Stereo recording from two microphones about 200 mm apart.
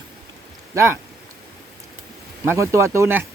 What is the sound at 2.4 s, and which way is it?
Speech, 15° right (ahead or behind).